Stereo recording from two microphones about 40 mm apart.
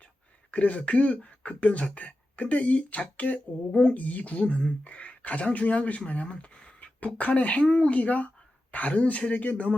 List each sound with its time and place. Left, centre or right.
0.5 s a woman's voice: left
3.9 s speech: left